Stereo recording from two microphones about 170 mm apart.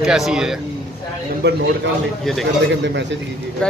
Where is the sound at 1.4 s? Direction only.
80° right.